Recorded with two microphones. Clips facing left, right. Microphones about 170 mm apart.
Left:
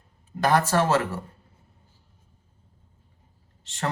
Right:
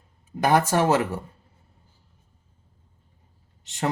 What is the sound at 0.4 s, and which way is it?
Speech, 15° right (ahead or behind).